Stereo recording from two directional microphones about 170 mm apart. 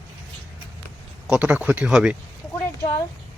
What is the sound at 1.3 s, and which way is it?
Speech, 5° right (ahead or behind).